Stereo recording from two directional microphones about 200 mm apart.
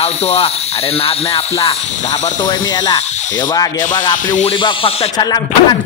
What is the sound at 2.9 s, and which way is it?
Snake, 35° left (ahead or behind).